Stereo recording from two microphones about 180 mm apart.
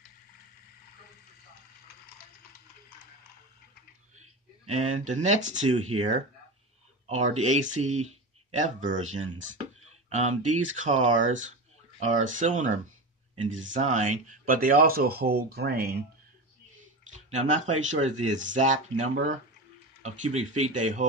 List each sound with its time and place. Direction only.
4.2 s speech: 40° right (ahead or behind); by 16.0 s 60° right (ahead or behind)
17.3 s speech: 40° right (ahead or behind)